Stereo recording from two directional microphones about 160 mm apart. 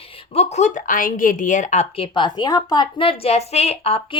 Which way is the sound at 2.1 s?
30° left (ahead or behind).